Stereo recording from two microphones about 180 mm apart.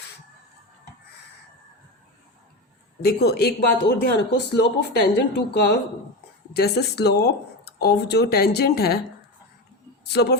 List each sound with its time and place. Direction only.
3.0 s speech: 60° left (ahead or behind)
10.0 s speech: 65° left (ahead or behind)